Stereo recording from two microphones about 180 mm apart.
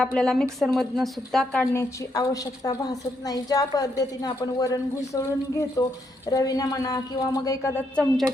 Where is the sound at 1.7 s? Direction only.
20° left (ahead or behind).